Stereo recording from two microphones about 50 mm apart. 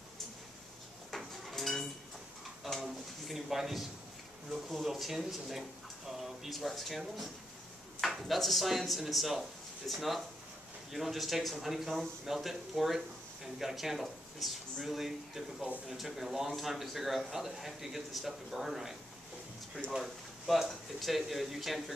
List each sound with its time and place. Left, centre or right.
1.1 s dishes: centre
2.6 s a sound: centre
4.8 s speech: centre
19.8 s speech: left
20.6 s speech: centre